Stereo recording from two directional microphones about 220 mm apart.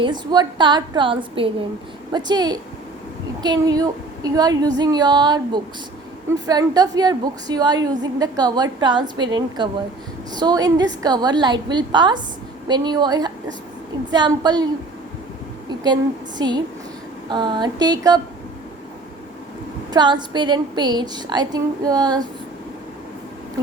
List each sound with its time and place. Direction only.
0.0 s a woman's voice: 20° right (ahead or behind)
16.4 s a woman's voice: 20° right (ahead or behind)
19.9 s a woman's voice: 20° right (ahead or behind)